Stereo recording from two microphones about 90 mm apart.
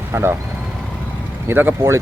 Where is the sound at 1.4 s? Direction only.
20° right (ahead or behind).